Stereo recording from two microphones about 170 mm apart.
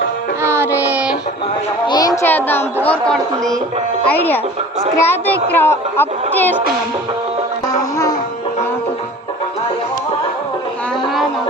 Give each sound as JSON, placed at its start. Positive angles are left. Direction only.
{"t": 0.4, "sound": "music", "side_deg": -15}
{"t": 0.8, "sound": "child singing", "side_deg": -10}
{"t": 1.9, "sound": "a sound", "side_deg": 20}
{"t": 2.3, "sound": "a woman's voice", "side_deg": 10}